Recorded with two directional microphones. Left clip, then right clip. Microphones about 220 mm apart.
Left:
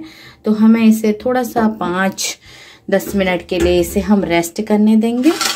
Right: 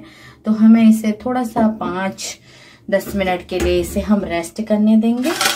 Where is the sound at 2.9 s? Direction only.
30° left (ahead or behind).